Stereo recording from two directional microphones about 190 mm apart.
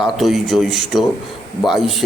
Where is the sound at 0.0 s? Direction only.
Centre (ahead or behind).